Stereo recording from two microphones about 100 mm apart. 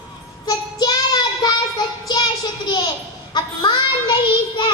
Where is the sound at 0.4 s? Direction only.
40° left (ahead or behind).